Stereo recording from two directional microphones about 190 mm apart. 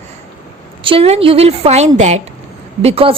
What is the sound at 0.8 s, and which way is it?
A woman's voice, 30° right (ahead or behind).